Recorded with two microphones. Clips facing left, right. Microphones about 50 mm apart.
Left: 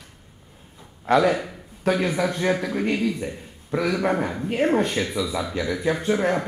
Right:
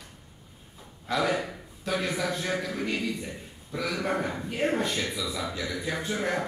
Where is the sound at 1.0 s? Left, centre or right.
Left.